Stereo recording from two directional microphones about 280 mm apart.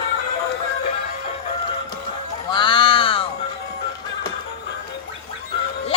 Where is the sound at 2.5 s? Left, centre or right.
Centre.